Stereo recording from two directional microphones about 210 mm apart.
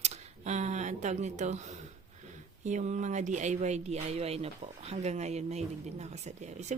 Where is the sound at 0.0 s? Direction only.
35° right (ahead or behind).